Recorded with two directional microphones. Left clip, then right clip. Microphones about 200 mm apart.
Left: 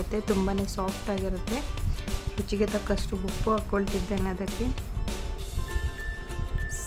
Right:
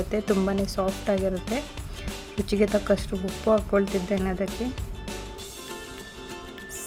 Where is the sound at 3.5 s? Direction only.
15° right (ahead or behind).